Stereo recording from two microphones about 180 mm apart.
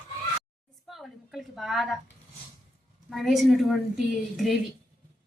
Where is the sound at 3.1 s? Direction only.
Centre (ahead or behind).